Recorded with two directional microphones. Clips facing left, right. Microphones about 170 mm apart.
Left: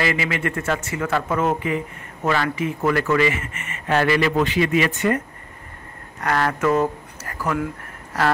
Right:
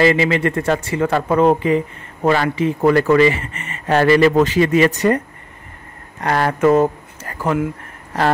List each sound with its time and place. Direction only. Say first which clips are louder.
0.0 s speech: right 8 dB; 30° right (ahead or behind)
6.2 s speech: right 5 dB; 30° right (ahead or behind)